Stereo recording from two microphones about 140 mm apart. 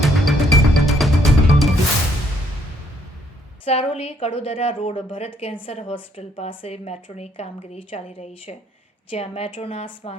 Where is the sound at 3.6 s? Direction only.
45° left (ahead or behind).